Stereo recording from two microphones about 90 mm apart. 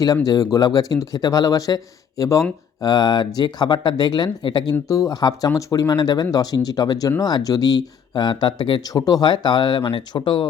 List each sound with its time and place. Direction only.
0.3 s speech: 45° left (ahead or behind)
4.9 s speech: 40° left (ahead or behind); by 8.8 s 60° left (ahead or behind)
8.8 s speech: 45° left (ahead or behind); by 10.5 s 65° left (ahead or behind)